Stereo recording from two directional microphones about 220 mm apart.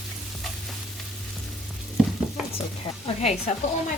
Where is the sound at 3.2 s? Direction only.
30° left (ahead or behind).